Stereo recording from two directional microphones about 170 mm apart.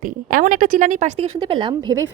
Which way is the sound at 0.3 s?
55° right (ahead or behind).